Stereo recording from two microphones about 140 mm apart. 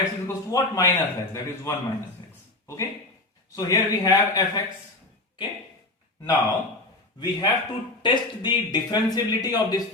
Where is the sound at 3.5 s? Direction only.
25° left (ahead or behind).